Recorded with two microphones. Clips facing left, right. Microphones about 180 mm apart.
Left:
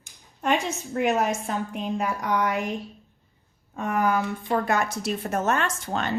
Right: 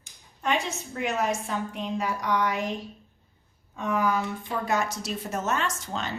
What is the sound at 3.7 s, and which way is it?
Speech, 55° left (ahead or behind).